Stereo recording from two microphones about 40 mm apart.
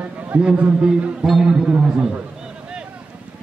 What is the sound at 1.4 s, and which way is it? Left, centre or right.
Speech, right.